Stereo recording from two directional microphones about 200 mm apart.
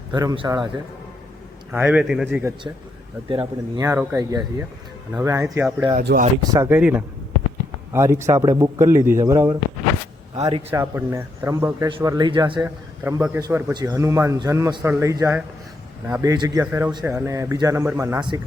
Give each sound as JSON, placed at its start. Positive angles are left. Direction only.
{"t": 0.1, "sound": "a man's voice", "side_deg": -20}
{"t": 1.7, "sound": "a man's voice", "side_deg": -10}
{"t": 3.2, "sound": "a man's voice", "side_deg": -25}
{"t": 3.8, "sound": "a man's voice", "side_deg": -15}
{"t": 6.0, "sound": "speech", "side_deg": -50}
{"t": 6.4, "sound": "a man's voice", "side_deg": -15}